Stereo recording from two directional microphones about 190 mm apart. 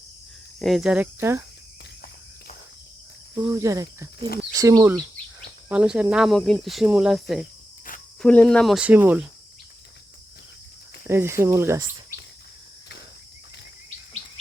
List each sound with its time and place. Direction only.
0.6 s speech: centre (ahead or behind)
3.3 s speech: 15° right (ahead or behind)
5.6 s speech: 5° right (ahead or behind)
11.0 s speech: 10° right (ahead or behind)